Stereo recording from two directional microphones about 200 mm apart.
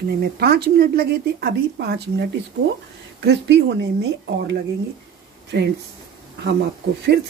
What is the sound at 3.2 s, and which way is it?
Speech, 60° right (ahead or behind).